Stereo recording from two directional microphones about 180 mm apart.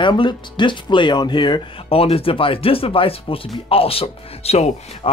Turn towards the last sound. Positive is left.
turn(degrees=35)  # may be behind; listen again after turning